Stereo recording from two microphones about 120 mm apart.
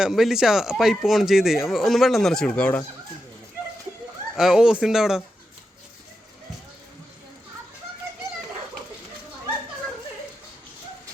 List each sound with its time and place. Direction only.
0.0 s speech: centre (ahead or behind)
4.4 s speech: 5° right (ahead or behind)